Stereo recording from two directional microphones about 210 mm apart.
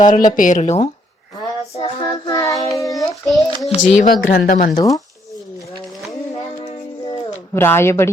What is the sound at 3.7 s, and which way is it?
Speech, 35° left (ahead or behind).